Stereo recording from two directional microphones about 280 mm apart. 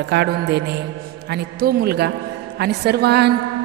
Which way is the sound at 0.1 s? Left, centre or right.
Right.